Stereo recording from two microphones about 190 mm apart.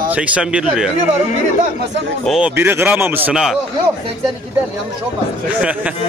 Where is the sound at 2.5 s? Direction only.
10° right (ahead or behind).